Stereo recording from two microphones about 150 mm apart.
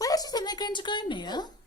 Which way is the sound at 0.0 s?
25° left (ahead or behind).